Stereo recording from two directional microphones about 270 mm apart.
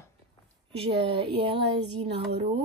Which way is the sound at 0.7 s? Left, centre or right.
Right.